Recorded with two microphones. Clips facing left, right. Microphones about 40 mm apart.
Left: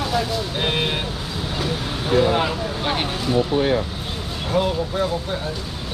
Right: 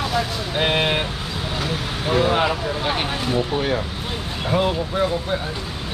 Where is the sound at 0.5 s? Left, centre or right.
Centre.